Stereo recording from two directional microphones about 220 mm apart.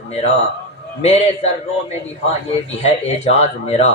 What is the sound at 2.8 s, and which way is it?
A man's voice, 30° left (ahead or behind).